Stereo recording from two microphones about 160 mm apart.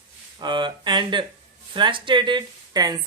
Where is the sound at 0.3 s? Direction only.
30° right (ahead or behind).